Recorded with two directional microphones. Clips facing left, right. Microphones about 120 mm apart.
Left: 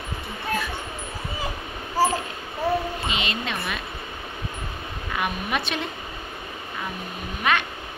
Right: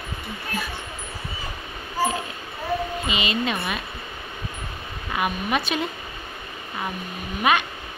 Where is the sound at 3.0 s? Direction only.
5° right (ahead or behind).